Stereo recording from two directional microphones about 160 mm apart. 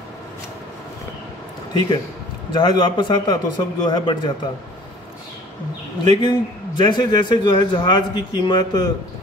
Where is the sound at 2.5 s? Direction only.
25° left (ahead or behind).